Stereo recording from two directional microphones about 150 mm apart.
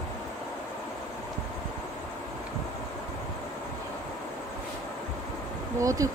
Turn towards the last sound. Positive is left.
turn(degrees=-20)  # may be behind; listen again after turning